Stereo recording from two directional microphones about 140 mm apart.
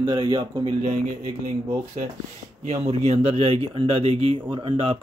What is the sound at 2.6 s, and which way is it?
Speech, 50° right (ahead or behind).